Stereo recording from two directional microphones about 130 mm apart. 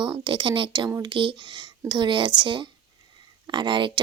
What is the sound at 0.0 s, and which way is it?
Speech, 35° right (ahead or behind).